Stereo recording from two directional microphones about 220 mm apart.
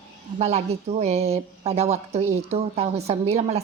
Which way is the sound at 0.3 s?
30° right (ahead or behind).